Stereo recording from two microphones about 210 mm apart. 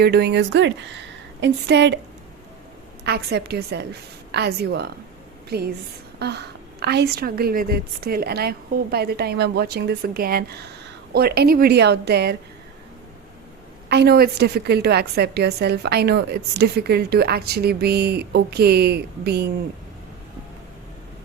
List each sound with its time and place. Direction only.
0.0 s a woman's voice: 50° right (ahead or behind)
3.0 s a woman's voice: 50° right (ahead or behind)
13.9 s a woman's voice: 50° right (ahead or behind)